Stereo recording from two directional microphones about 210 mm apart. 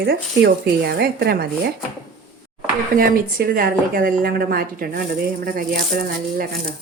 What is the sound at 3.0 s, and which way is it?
A woman's voice, 45° right (ahead or behind).